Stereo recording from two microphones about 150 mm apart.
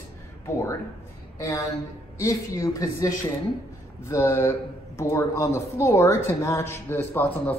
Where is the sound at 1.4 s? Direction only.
20° left (ahead or behind).